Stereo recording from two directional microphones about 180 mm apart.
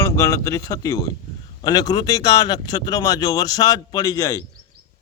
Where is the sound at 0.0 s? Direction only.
15° left (ahead or behind).